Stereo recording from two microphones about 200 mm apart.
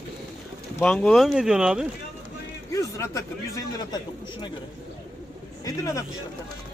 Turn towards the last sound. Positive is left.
turn(degrees=15)  # may be behind; listen again after turning